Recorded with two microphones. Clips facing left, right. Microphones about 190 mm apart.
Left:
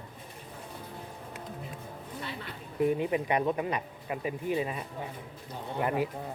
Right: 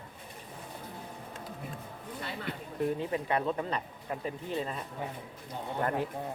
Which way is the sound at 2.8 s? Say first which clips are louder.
Left 5 dB; 10° left (ahead or behind).